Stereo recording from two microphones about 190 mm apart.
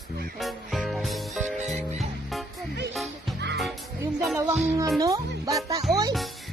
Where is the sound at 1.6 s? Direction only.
35° right (ahead or behind).